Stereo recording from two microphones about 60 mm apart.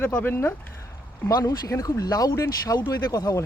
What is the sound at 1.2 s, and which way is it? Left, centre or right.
Speech, left.